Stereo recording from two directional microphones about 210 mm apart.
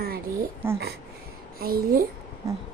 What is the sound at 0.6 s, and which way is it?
Speech, 10° right (ahead or behind).